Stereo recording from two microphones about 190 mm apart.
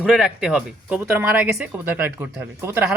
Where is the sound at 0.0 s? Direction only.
5° right (ahead or behind).